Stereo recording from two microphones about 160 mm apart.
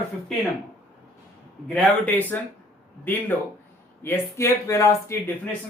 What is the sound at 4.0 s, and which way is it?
Speech, 15° left (ahead or behind).